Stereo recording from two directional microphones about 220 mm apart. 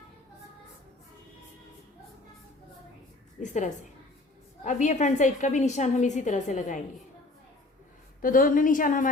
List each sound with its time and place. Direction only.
3.4 s a woman's voice: 35° left (ahead or behind)
8.2 s a woman's voice: 40° left (ahead or behind)